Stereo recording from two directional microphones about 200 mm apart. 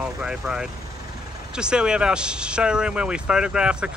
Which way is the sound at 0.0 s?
5° right (ahead or behind).